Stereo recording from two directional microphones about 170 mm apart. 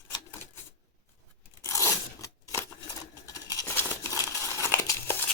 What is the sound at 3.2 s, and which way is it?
Tearing, 20° left (ahead or behind).